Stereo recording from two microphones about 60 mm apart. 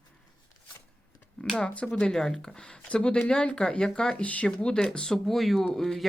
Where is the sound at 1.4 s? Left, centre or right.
Centre.